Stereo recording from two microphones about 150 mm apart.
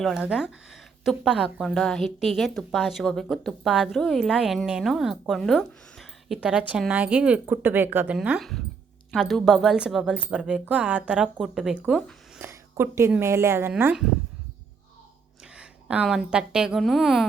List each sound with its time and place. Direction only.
0.0 s speech: 5° right (ahead or behind)
12.4 s speech: 15° right (ahead or behind)
15.5 s a woman's voice: 10° right (ahead or behind)